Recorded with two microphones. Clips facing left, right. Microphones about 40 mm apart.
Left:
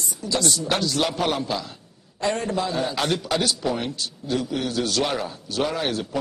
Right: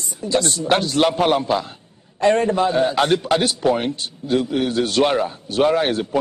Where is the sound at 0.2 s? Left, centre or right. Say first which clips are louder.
Right 4 dB; right.